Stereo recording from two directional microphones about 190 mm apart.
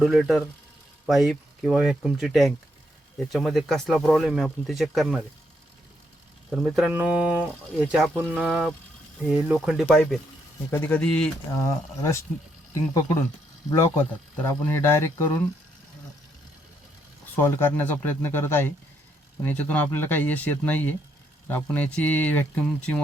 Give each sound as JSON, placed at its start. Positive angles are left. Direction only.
{"t": 0.0, "sound": "speech", "side_deg": 0}
{"t": 6.5, "sound": "speech", "side_deg": 0}
{"t": 11.5, "sound": "speech", "side_deg": 15}
{"t": 17.3, "sound": "speech", "side_deg": 10}